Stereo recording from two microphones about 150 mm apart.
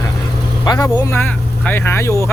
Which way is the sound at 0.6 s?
30° left (ahead or behind).